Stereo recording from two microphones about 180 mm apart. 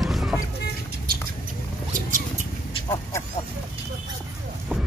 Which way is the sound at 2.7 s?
20° left (ahead or behind).